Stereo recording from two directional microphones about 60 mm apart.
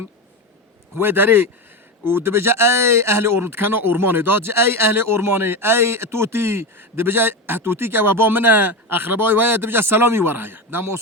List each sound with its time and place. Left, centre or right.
0.9 s speech: right